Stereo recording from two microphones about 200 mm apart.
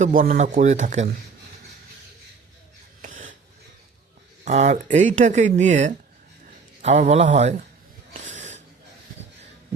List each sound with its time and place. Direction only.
0.0 s speech: 40° right (ahead or behind)
3.0 s a sound: 40° right (ahead or behind)
4.4 s speech: 35° right (ahead or behind)
8.4 s wheeze: 35° right (ahead or behind)